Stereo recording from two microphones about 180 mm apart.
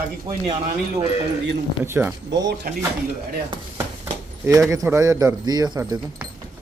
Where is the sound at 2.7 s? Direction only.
55° right (ahead or behind).